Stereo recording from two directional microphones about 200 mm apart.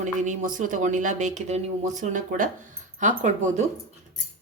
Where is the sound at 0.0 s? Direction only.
40° right (ahead or behind).